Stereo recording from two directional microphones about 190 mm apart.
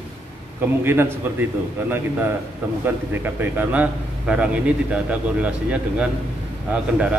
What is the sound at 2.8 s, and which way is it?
A man's voice, 10° right (ahead or behind).